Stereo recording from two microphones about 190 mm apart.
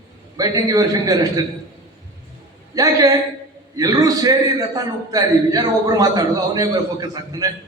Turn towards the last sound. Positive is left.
turn(degrees=-20)  # may be behind; listen again after turning